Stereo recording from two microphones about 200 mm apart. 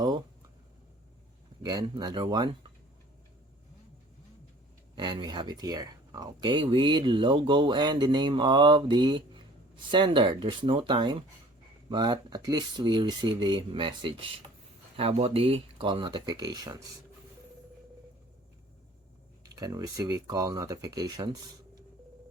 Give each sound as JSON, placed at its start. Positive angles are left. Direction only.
{"t": 1.6, "sound": "speech", "side_deg": -20}
{"t": 4.9, "sound": "speech", "side_deg": -20}
{"t": 19.5, "sound": "speech", "side_deg": -20}